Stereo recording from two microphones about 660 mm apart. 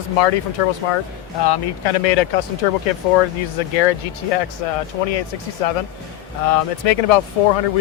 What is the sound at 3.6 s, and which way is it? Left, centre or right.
Speech, left.